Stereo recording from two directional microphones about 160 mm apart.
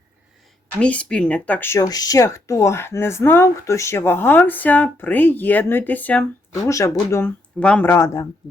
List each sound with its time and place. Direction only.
0.8 s speech: 10° left (ahead or behind)
7.6 s speech: 10° left (ahead or behind)